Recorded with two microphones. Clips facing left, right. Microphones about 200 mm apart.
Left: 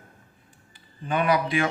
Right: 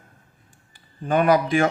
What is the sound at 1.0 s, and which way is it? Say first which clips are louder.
Speech: right 5 dB; 45° right (ahead or behind).